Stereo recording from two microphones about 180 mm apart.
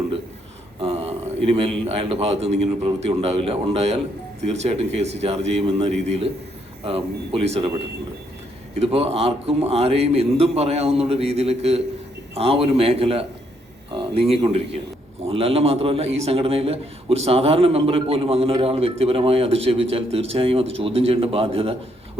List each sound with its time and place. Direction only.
0.8 s a man's voice: 30° right (ahead or behind)
8.8 s a man's voice: 35° right (ahead or behind)